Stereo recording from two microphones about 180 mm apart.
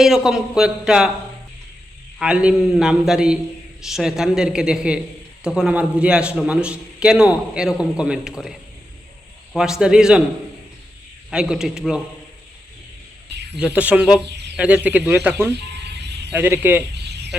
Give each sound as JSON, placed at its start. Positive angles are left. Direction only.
{"t": 0.0, "sound": "a man's voice", "side_deg": 0}
{"t": 2.1, "sound": "a man's voice", "side_deg": -5}
{"t": 11.3, "sound": "a man's voice", "side_deg": -5}
{"t": 13.6, "sound": "a man's voice", "side_deg": -5}
{"t": 16.9, "sound": "a sound", "side_deg": -70}